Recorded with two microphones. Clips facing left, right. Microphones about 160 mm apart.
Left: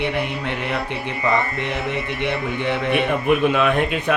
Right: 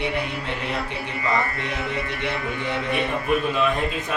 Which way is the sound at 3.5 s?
70° left (ahead or behind).